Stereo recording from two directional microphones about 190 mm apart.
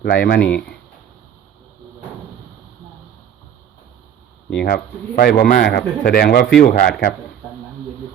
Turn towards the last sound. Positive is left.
turn(degrees=50)  # may be behind; listen again after turning